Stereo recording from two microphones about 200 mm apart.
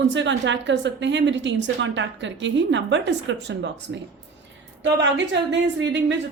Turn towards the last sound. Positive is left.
turn(degrees=-65)  # may be behind; listen again after turning